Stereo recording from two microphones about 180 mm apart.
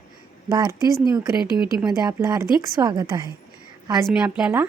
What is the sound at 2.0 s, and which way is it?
A woman's voice, 20° right (ahead or behind).